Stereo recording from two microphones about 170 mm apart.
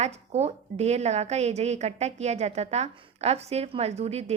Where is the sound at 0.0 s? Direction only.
40° right (ahead or behind).